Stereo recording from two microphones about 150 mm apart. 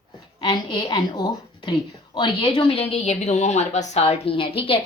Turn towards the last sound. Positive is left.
turn(degrees=35)  # may be behind; listen again after turning